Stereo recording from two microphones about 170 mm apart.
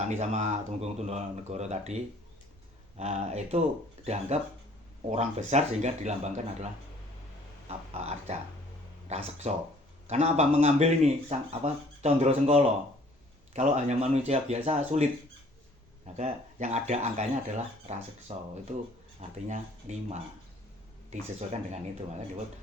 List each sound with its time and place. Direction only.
0.1 s speech: 40° right (ahead or behind)
3.0 s speech: 40° right (ahead or behind)
7.7 s speech: 40° right (ahead or behind)
16.1 s speech: 45° right (ahead or behind)